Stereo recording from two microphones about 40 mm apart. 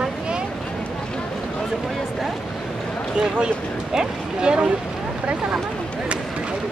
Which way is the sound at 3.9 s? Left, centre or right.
Right.